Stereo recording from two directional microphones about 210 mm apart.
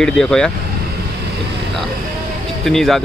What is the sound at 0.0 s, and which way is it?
Speech, 5° left (ahead or behind).